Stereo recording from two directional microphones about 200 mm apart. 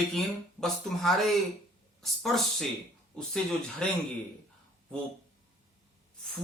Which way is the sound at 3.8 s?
5° left (ahead or behind).